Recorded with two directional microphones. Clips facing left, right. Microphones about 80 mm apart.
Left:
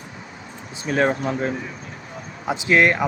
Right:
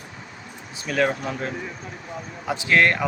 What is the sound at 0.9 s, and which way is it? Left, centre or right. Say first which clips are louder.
A man's voice: left 3 dB; left.